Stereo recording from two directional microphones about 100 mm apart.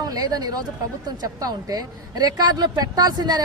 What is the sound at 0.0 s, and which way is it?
A woman's voice, 40° right (ahead or behind).